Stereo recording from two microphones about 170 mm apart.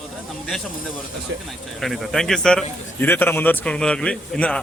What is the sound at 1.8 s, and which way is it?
A man's voice, centre (ahead or behind).